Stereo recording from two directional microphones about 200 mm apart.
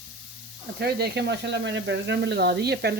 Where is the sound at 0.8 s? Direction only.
50° right (ahead or behind).